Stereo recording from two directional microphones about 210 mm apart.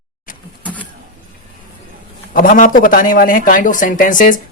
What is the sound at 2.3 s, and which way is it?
Speech, 40° left (ahead or behind).